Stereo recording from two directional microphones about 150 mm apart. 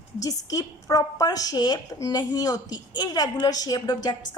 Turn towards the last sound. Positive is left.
turn(degrees=25)  # may be behind; listen again after turning